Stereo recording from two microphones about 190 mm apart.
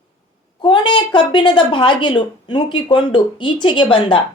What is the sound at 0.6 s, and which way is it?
A woman's voice, 25° left (ahead or behind).